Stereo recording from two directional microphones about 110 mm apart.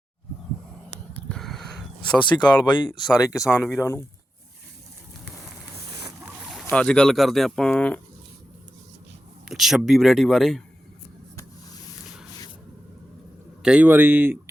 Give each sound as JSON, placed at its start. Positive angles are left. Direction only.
{"t": 1.3, "sound": "a sound", "side_deg": 5}
{"t": 2.4, "sound": "speech", "side_deg": 45}
{"t": 3.3, "sound": "speech", "side_deg": 30}
{"t": 6.4, "sound": "a sound", "side_deg": 0}
{"t": 6.7, "sound": "speech", "side_deg": 10}
{"t": 9.5, "sound": "speech", "side_deg": -5}
{"t": 13.6, "sound": "speech", "side_deg": -10}